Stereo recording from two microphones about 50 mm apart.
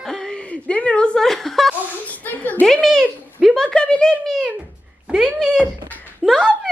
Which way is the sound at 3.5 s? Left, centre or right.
Centre.